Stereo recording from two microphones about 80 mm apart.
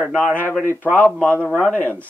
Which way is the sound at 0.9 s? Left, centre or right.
Centre.